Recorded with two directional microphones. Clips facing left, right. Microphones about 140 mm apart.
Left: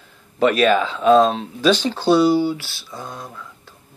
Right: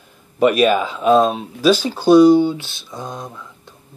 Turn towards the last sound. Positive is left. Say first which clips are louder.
# right 2 dB
turn(degrees=-20)  # may be behind; listen again after turning